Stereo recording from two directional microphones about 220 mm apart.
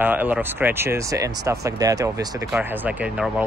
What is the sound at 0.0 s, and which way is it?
Speech, 10° right (ahead or behind).